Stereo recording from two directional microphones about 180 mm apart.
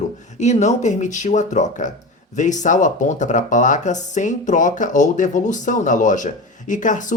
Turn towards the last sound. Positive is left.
turn(degrees=45)  # may be behind; listen again after turning